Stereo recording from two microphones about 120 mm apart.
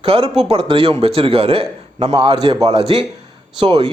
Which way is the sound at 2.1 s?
35° right (ahead or behind).